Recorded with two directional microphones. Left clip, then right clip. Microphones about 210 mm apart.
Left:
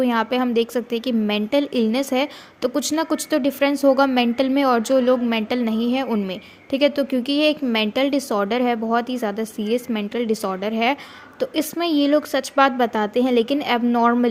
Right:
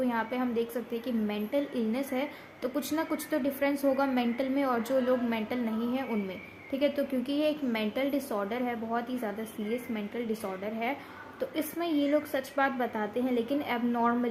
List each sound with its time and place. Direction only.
0.0 s a woman's voice: 40° left (ahead or behind)